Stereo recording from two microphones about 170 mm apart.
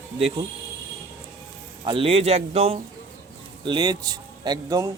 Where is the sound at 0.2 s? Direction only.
35° right (ahead or behind).